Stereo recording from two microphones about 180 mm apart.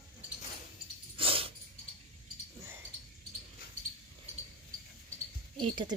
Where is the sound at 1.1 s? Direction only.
30° right (ahead or behind).